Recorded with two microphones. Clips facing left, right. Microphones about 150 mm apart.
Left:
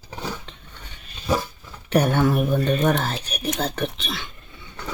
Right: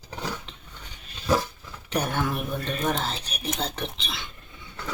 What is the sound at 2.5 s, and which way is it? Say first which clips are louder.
Speech: left 7 dB; 65° left (ahead or behind).